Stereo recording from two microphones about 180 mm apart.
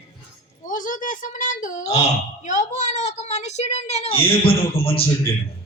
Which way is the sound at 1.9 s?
40° left (ahead or behind).